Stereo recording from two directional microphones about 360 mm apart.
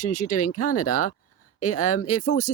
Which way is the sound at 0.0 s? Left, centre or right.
Left.